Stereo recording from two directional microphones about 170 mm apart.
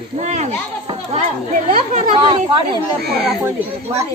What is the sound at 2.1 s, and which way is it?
Speech, 30° right (ahead or behind).